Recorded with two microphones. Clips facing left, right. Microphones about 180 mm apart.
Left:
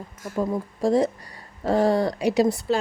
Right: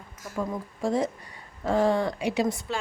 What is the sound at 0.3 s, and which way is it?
A woman's voice, 35° left (ahead or behind).